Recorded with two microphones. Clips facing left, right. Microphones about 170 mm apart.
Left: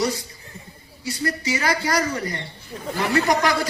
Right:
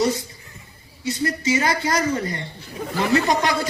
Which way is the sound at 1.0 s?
20° right (ahead or behind).